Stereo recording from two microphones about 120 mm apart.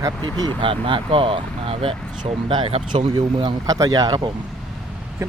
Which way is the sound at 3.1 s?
35° right (ahead or behind).